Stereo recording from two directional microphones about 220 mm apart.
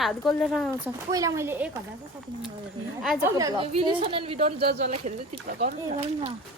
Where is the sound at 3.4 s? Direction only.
20° right (ahead or behind).